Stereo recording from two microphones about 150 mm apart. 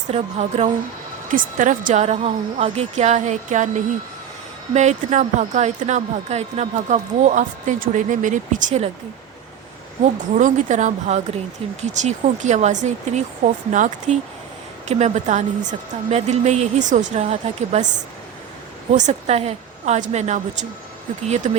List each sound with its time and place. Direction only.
0.1 s speech: 45° right (ahead or behind)
1.3 s speech: 60° right (ahead or behind)
4.7 s speech: 50° right (ahead or behind)
10.3 s speech: 55° right (ahead or behind)